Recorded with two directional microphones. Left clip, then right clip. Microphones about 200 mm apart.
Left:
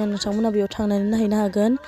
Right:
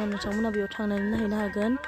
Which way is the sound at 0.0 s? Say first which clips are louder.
Left 6 dB; 35° left (ahead or behind).